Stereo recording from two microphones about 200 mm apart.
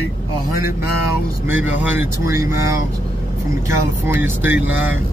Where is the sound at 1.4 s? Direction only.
10° right (ahead or behind).